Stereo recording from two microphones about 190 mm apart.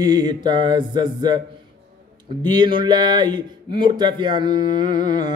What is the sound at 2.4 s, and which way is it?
Speech, 25° right (ahead or behind).